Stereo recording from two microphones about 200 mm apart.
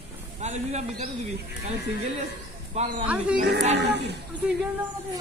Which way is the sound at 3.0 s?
5° right (ahead or behind).